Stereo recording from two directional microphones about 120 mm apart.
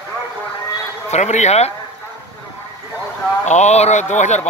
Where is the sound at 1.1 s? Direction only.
75° left (ahead or behind).